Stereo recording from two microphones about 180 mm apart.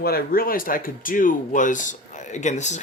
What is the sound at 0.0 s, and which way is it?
Speech, 55° left (ahead or behind).